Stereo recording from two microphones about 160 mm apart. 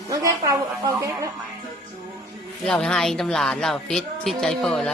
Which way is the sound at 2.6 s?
5° left (ahead or behind).